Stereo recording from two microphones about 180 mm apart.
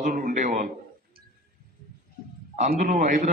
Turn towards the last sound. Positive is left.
turn(degrees=-45)  # may be behind; listen again after turning